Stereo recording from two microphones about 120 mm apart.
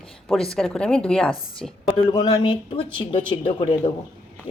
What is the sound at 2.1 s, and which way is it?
Speech, 35° left (ahead or behind).